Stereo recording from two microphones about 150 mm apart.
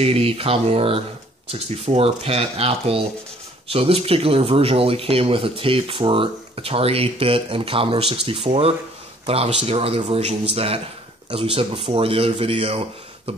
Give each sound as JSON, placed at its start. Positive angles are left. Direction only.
{"t": 0.0, "sound": "speech", "side_deg": -40}